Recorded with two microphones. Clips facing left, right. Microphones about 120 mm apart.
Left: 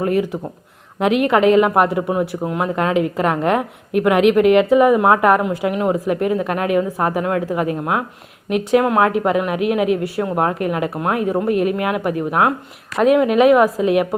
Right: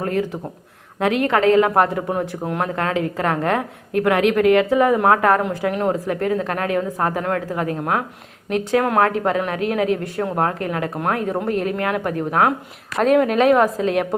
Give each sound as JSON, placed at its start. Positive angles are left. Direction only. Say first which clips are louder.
{"t": 0.0, "sound": "a woman's voice", "louder": "left 4 dB", "side_deg": 15}
{"t": 2.7, "sound": "a woman's voice", "louder": "left 4 dB", "side_deg": 15}